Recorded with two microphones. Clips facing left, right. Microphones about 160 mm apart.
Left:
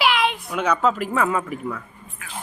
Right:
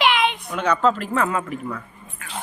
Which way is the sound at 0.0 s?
Centre (ahead or behind).